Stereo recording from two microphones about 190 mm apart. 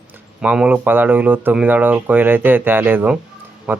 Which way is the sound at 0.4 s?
5° right (ahead or behind).